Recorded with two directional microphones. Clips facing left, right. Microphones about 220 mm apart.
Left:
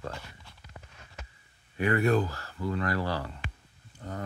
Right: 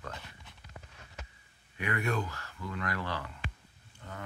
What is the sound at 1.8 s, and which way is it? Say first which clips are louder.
Speech: left 8 dB; 35° left (ahead or behind).